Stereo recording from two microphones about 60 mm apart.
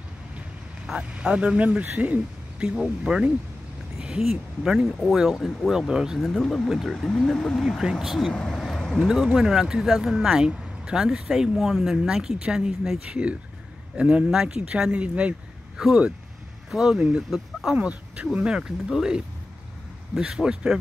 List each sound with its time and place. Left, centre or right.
0.8 s speech: centre
2.6 s speech: centre
6.2 s speech: centre; by 15.3 s right
16.7 s speech: centre
17.7 s speech: right